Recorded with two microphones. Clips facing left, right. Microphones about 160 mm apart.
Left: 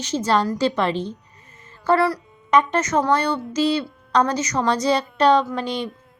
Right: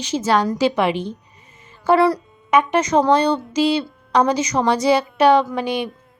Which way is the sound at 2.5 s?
10° right (ahead or behind).